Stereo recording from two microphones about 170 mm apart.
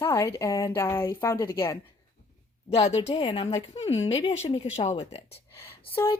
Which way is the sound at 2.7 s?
40° left (ahead or behind).